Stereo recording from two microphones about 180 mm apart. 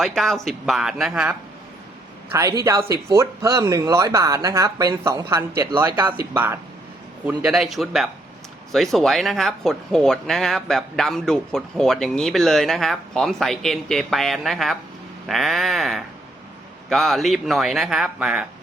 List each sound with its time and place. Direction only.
0.0 s speech: centre (ahead or behind)
2.3 s speech: 15° right (ahead or behind)